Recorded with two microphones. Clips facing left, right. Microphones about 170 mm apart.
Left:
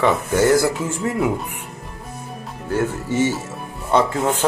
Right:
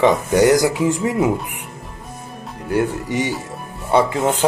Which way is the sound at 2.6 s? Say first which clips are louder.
Right 2 dB; 15° right (ahead or behind).